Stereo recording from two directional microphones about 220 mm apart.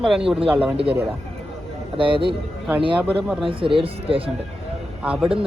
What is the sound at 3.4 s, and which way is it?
Speech, 25° right (ahead or behind).